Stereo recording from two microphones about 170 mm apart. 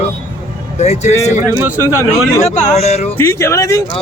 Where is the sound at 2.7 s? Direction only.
40° left (ahead or behind).